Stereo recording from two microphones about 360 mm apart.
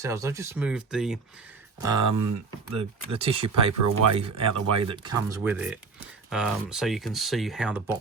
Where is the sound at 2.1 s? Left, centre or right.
Right.